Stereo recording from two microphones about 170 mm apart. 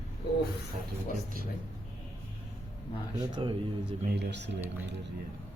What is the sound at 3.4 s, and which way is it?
Speech, 30° right (ahead or behind).